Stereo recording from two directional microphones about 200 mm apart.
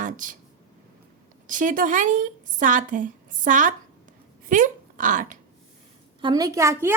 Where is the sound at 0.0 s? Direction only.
40° right (ahead or behind).